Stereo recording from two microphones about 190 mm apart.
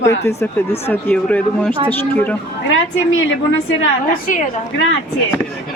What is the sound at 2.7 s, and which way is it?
A woman's voice, 90° left.